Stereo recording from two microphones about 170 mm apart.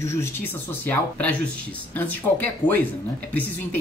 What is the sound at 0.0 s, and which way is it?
A woman's voice, 15° left (ahead or behind).